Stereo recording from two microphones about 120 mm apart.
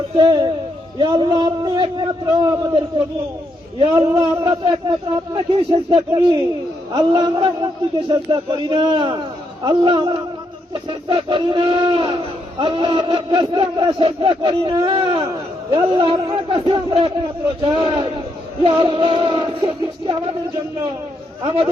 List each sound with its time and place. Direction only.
0.2 s a man's voice: 35° right (ahead or behind)
3.8 s a man's voice: 40° right (ahead or behind)
21.4 s speech: 50° right (ahead or behind)